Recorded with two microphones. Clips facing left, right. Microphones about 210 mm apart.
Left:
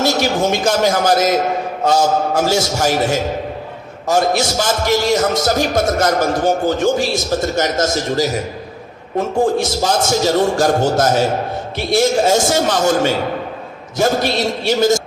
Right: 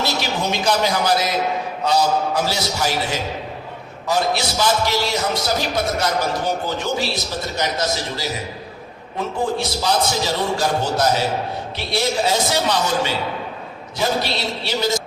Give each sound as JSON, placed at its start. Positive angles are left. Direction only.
{"t": 0.0, "sound": "a man's voice", "side_deg": 45}